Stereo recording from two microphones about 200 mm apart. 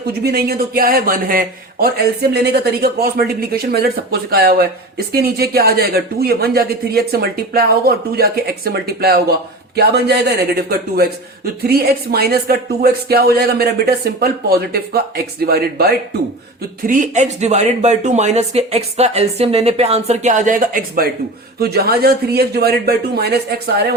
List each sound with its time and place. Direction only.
0.0 s a man's voice: 50° right (ahead or behind)
16.8 s a man's voice: 40° right (ahead or behind)